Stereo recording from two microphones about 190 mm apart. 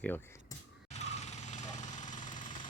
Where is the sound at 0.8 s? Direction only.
35° left (ahead or behind).